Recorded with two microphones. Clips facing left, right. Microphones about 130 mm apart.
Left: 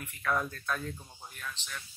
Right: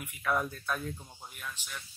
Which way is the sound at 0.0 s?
10° right (ahead or behind).